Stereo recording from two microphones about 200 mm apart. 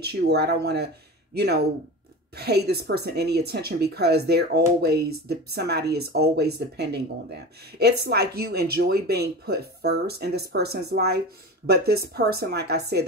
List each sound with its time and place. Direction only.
0.0 s speech: 55° right (ahead or behind)